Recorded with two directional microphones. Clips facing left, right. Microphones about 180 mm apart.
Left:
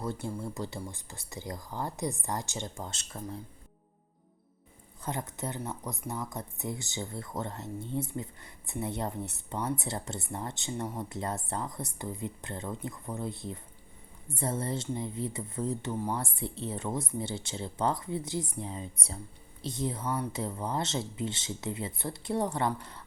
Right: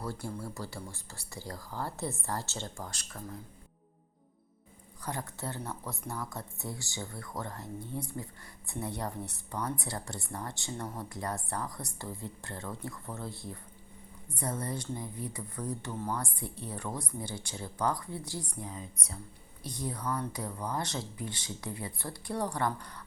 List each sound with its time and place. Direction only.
0.0 s speech: 20° left (ahead or behind)
5.0 s speech: 20° left (ahead or behind)